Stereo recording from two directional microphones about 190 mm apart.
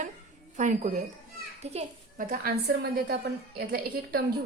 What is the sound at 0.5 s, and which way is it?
A woman's voice, 40° right (ahead or behind).